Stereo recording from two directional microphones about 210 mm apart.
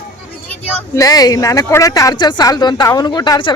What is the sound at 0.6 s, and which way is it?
Speech, 10° left (ahead or behind).